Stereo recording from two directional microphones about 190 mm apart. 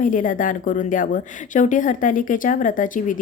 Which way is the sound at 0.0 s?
45° left (ahead or behind).